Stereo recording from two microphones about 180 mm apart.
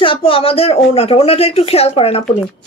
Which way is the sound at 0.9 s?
35° left (ahead or behind).